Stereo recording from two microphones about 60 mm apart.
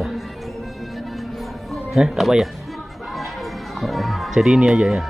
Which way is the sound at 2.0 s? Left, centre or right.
Centre.